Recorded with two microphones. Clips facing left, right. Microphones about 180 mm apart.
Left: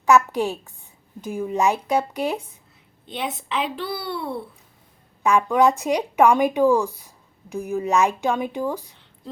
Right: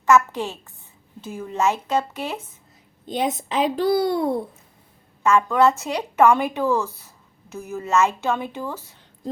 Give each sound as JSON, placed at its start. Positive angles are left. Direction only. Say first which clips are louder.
{"t": 0.0, "sound": "speech", "louder": "left 1 dB", "side_deg": 15}
{"t": 3.1, "sound": "a child's voice", "louder": "right 4 dB", "side_deg": -40}
{"t": 5.2, "sound": "speech", "louder": "even", "side_deg": 15}